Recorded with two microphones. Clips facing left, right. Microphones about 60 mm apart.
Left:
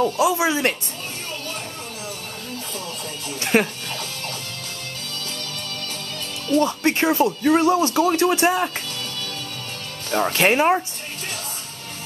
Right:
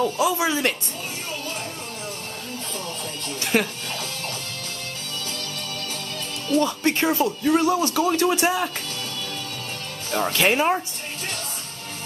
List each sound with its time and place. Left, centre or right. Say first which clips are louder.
0.0 s speech: left 2 dB; centre
3.3 s music: left 3 dB; left
6.6 s speech: left 2 dB; centre
8.1 s speech: left 2 dB; centre
10.3 s speech: left 3 dB; centre